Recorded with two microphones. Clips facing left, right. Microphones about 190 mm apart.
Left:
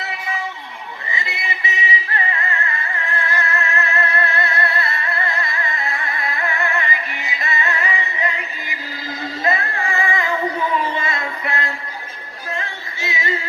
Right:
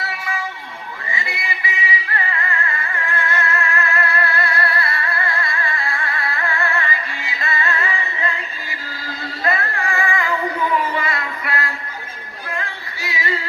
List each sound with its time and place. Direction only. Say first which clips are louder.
1.1 s music: even; 20° left (ahead or behind)